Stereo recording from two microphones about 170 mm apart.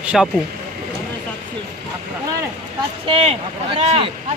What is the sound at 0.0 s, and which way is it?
Speech, 5° right (ahead or behind).